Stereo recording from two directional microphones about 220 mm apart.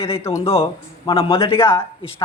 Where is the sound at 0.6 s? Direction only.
25° left (ahead or behind).